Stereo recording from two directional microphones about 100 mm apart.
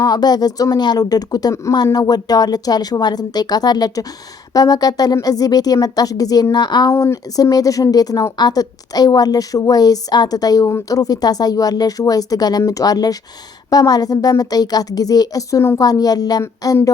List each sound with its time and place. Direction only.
0.0 s a woman's voice: 45° left (ahead or behind)
6.9 s a woman's voice: 30° left (ahead or behind)
15.8 s a woman's voice: 40° left (ahead or behind)